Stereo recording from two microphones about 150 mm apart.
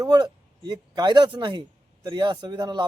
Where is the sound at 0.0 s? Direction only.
25° right (ahead or behind).